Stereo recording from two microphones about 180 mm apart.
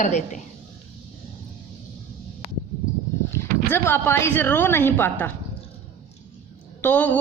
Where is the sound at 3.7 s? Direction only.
10° left (ahead or behind).